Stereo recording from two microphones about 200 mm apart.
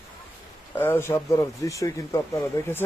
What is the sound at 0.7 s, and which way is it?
Speech, 10° left (ahead or behind).